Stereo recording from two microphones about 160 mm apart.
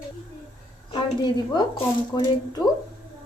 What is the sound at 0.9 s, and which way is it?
A woman's voice, 30° left (ahead or behind).